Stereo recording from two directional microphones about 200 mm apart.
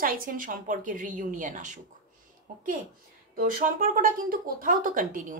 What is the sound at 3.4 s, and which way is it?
A woman's voice, 45° right (ahead or behind).